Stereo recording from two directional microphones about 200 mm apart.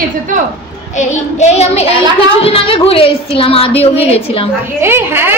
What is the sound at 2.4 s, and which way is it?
A woman's voice, 25° left (ahead or behind).